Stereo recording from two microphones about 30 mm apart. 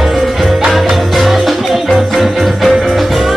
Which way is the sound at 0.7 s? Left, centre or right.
Centre.